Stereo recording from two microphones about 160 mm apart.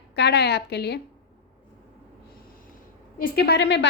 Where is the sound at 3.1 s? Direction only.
70° left (ahead or behind); by 3.9 s 90° left.